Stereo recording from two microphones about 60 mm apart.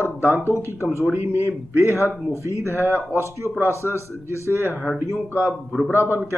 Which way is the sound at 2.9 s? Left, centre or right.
Left.